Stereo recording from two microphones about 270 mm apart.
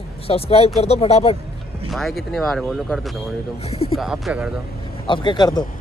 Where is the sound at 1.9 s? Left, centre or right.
Centre.